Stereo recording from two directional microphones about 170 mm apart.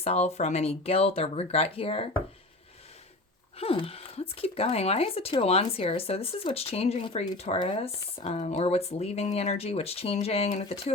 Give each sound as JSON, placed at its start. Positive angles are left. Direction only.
{"t": 0.0, "sound": "speech", "side_deg": 35}
{"t": 3.6, "sound": "speech", "side_deg": 35}